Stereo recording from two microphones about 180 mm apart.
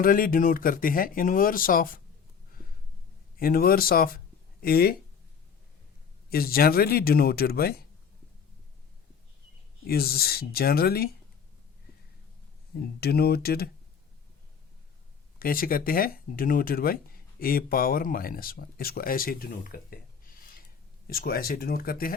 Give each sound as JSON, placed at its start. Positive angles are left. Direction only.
{"t": 0.0, "sound": "speech", "side_deg": 50}
{"t": 3.3, "sound": "speech", "side_deg": 55}
{"t": 6.3, "sound": "speech", "side_deg": 55}
{"t": 9.8, "sound": "speech", "side_deg": 60}
{"t": 12.7, "sound": "speech", "side_deg": 60}
{"t": 15.4, "sound": "speech", "side_deg": 55}